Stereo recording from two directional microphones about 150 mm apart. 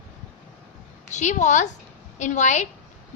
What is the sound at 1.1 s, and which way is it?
A woman's voice, 50° left (ahead or behind).